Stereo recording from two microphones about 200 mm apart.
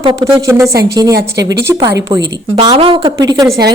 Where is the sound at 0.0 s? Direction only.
20° right (ahead or behind).